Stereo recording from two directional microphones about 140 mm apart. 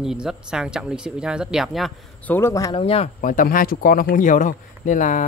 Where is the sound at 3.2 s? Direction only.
80° left.